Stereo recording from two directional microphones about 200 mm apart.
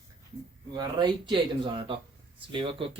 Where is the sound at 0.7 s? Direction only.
20° right (ahead or behind).